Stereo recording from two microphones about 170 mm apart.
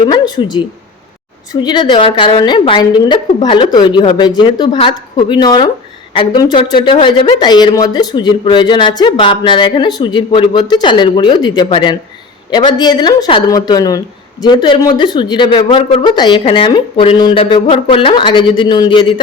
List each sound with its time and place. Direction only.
0.1 s speech: 25° left (ahead or behind)